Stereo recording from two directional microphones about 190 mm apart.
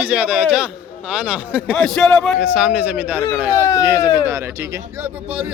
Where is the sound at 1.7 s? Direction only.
5° left (ahead or behind).